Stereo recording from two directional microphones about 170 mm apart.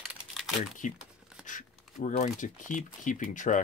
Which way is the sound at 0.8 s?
50° left (ahead or behind).